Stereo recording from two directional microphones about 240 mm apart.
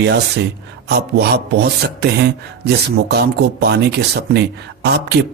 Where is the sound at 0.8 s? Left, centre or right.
Right.